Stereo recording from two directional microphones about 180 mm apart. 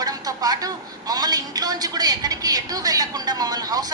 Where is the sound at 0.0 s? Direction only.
20° right (ahead or behind).